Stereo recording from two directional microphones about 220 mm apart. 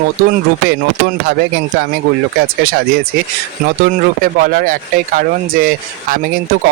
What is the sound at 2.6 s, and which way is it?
Speech, 40° right (ahead or behind).